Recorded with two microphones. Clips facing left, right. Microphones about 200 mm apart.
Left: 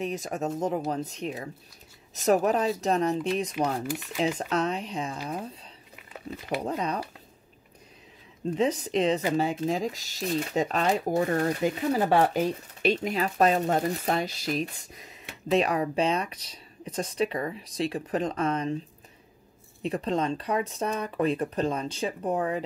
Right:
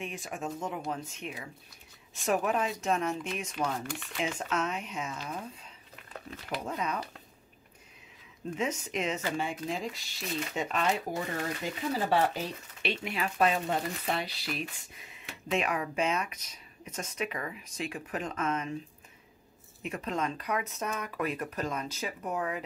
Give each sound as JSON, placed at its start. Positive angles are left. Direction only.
{"t": 0.0, "sound": "speech", "side_deg": 40}
{"t": 3.8, "sound": "speech", "side_deg": 5}
{"t": 4.4, "sound": "speech", "side_deg": 35}
{"t": 5.9, "sound": "a sound", "side_deg": 5}
{"t": 6.6, "sound": "speech", "side_deg": 35}
{"t": 8.5, "sound": "speech", "side_deg": 35}
{"t": 19.8, "sound": "speech", "side_deg": 35}